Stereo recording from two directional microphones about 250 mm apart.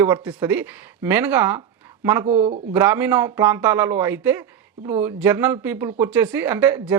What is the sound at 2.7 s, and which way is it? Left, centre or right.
Speech, centre.